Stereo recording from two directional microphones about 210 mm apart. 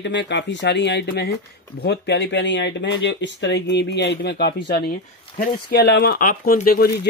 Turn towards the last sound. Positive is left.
turn(degrees=45)  # may be behind; listen again after turning